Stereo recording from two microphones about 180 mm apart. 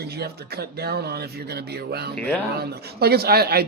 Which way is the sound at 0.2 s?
60° right (ahead or behind).